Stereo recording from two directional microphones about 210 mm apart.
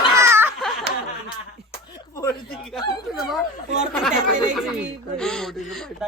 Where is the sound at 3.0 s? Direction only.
Centre (ahead or behind).